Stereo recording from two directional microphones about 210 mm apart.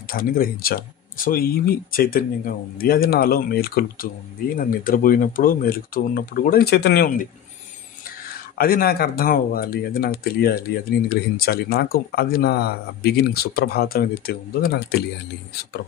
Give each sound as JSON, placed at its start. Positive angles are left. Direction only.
{"t": 0.1, "sound": "speech", "side_deg": 45}
{"t": 8.5, "sound": "speech", "side_deg": 45}